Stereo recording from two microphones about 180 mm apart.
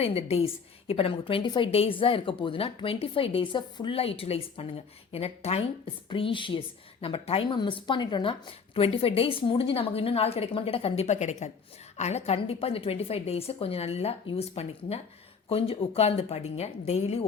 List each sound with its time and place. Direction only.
0.0 s a woman's voice: 35° left (ahead or behind)